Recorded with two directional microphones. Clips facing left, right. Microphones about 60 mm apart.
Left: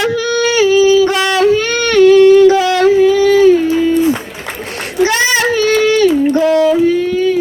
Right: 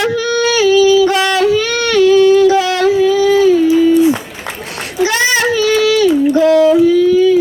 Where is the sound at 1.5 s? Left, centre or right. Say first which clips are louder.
Left 1 dB; left.